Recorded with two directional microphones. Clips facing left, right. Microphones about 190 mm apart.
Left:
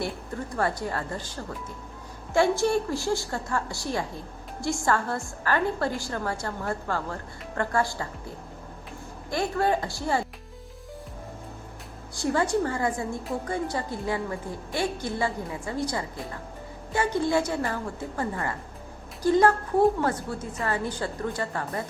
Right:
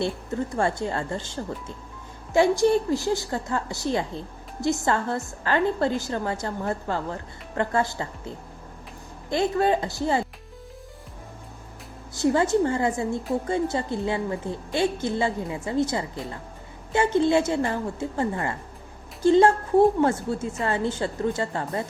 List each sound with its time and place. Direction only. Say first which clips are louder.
0.0 s a woman's voice: right 5 dB; 25° right (ahead or behind)
9.3 s a woman's voice: right 3 dB; 20° right (ahead or behind)
12.1 s a woman's voice: right 4 dB; 20° right (ahead or behind)